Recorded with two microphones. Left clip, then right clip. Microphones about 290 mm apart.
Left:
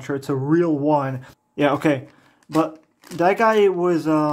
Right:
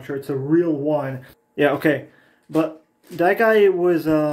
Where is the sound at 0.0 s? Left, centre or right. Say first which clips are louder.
Left 1 dB; centre.